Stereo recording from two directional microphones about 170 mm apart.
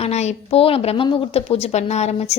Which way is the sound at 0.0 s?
40° left (ahead or behind).